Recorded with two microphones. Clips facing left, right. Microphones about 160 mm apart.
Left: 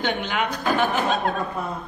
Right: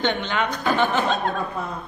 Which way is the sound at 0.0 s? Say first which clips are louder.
Right 1 dB; 5° left (ahead or behind).